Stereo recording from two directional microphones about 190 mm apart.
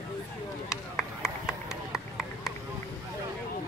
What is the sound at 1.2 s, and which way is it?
Run, 5° right (ahead or behind).